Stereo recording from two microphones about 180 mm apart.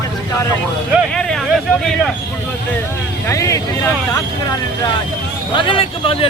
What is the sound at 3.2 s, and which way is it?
Speech, 15° left (ahead or behind).